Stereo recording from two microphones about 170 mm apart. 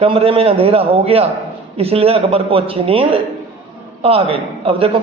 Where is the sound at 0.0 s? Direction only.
35° right (ahead or behind).